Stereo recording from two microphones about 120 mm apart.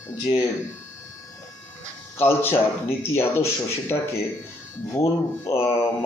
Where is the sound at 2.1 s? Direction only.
20° left (ahead or behind).